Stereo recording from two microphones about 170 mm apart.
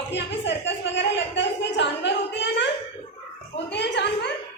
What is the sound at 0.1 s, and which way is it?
A woman's voice, 90° left.